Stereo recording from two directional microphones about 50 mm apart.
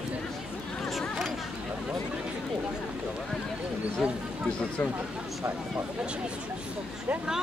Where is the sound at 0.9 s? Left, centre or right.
Centre.